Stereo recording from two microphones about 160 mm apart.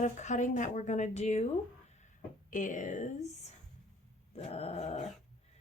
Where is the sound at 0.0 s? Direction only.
50° left (ahead or behind).